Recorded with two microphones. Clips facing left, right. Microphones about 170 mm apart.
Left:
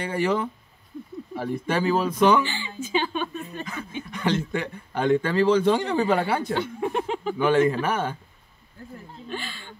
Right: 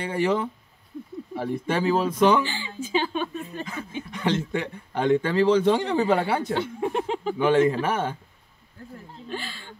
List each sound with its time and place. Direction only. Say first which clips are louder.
0.0 s speech: even; 25° right (ahead or behind)
9.3 s speech: even; 35° right (ahead or behind)